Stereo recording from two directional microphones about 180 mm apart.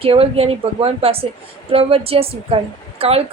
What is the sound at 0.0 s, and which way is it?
A woman's voice, 35° right (ahead or behind).